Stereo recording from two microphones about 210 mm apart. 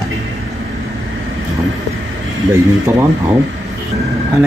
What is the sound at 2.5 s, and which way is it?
Speech, 15° right (ahead or behind).